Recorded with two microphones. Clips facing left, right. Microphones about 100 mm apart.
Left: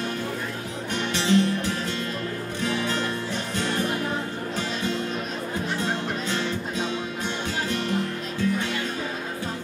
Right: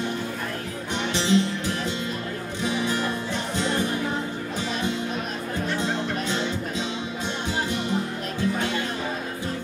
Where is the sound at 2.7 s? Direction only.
15° right (ahead or behind).